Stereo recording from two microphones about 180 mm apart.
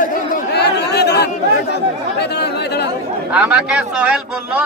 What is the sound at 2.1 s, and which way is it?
Speech, 70° left (ahead or behind).